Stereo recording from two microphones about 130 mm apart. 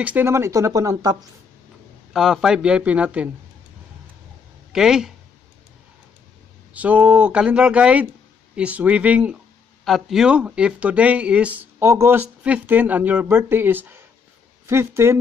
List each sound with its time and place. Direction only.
0.0 s speech: 15° right (ahead or behind)
2.1 s speech: 5° right (ahead or behind)
4.7 s speech: 5° right (ahead or behind)
6.7 s speech: 10° right (ahead or behind)
9.8 s speech: centre (ahead or behind)
11.8 s speech: 20° right (ahead or behind)